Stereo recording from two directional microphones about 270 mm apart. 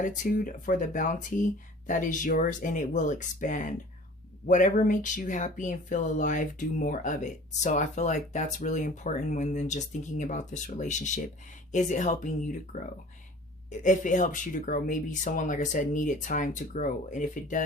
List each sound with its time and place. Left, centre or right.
0.0 s speech: left